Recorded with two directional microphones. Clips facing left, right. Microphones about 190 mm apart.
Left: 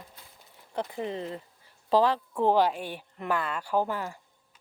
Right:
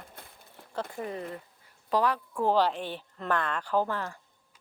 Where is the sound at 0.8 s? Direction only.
20° left (ahead or behind).